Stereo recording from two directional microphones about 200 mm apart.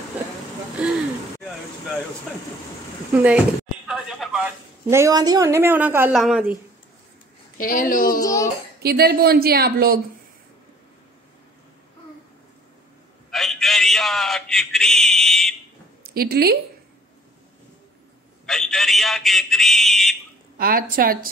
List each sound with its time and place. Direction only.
0.8 s gasp: 5° right (ahead or behind)
3.2 s speech: 5° right (ahead or behind)
7.5 s speech: 45° left (ahead or behind)
8.2 s a child's voice: 15° left (ahead or behind)
8.8 s speech: 50° right (ahead or behind)
13.3 s a man's voice: centre (ahead or behind)
16.0 s a woman's voice: 50° right (ahead or behind)
18.4 s a man's voice: centre (ahead or behind)
20.5 s speech: 45° right (ahead or behind)